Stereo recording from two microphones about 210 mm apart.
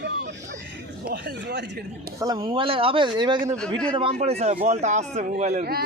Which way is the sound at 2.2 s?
15° right (ahead or behind).